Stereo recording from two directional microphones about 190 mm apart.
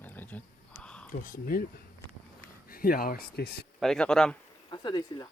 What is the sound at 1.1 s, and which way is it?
Speech, 45° left (ahead or behind).